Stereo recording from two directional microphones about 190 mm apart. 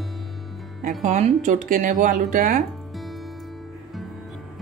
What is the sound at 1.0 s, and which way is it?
Speech, 40° right (ahead or behind).